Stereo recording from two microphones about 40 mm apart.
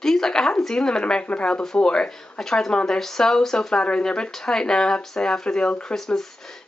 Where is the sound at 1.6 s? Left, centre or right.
Centre.